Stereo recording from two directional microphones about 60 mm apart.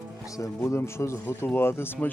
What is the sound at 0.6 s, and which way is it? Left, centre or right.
Speech, left.